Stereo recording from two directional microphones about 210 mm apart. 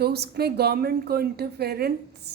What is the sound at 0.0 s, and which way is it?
A woman's voice, 50° right (ahead or behind).